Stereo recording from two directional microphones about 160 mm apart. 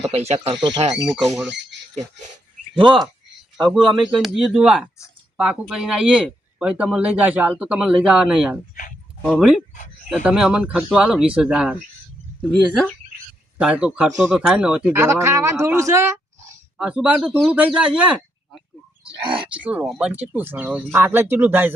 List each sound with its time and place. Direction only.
0.0 s speech: 40° right (ahead or behind)
2.7 s speech: 30° right (ahead or behind)
3.6 s speech: centre (ahead or behind)
8.8 s dog: 50° left (ahead or behind)
9.2 s speech: 5° right (ahead or behind)
12.4 s speech: 5° left (ahead or behind)
13.6 s speech: 5° right (ahead or behind)
14.9 s a sound: 15° right (ahead or behind)
17.7 s speech: 5° right (ahead or behind)
19.2 s speech: 30° right (ahead or behind)
19.5 s speech: 10° right (ahead or behind)